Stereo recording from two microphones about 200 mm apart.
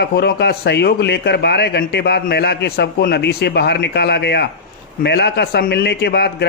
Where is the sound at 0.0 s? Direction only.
55° left (ahead or behind).